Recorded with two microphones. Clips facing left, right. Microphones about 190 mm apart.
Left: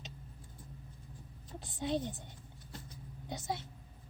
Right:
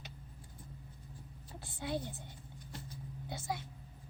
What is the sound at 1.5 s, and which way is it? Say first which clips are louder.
Speech: left 4 dB; 20° left (ahead or behind).